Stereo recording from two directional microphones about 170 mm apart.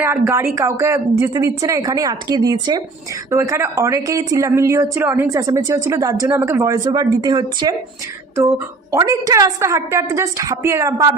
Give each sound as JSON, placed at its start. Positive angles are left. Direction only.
{"t": 0.0, "sound": "a woman's voice", "side_deg": -15}